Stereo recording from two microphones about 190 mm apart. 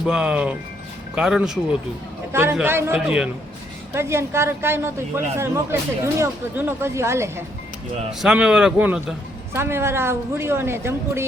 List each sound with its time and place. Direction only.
0.0 s a man's voice: 5° right (ahead or behind)